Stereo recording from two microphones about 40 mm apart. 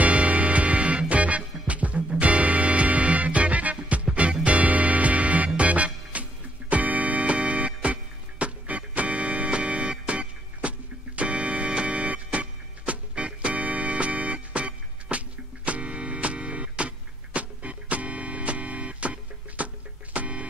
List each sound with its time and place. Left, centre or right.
0.0 s music: right